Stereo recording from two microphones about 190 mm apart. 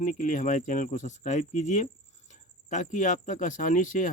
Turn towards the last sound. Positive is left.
turn(degrees=45)  # may be behind; listen again after turning